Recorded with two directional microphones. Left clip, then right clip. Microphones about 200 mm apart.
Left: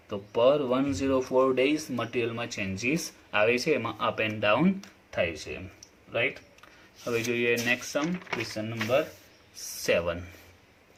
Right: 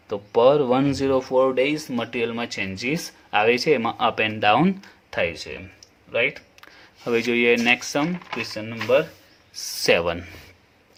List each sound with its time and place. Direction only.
0.1 s speech: 40° right (ahead or behind)
5.1 s speech: 50° right (ahead or behind)
9.8 s speech: 40° right (ahead or behind)